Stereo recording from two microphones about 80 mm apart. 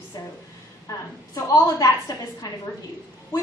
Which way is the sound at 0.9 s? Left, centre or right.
Left.